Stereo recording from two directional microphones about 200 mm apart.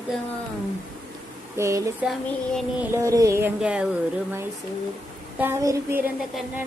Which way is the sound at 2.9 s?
15° right (ahead or behind).